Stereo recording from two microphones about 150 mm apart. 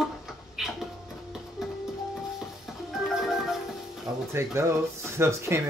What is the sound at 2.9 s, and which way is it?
Music, centre (ahead or behind).